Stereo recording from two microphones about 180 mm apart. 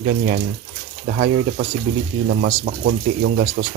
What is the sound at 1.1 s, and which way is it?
Speech, 65° right (ahead or behind).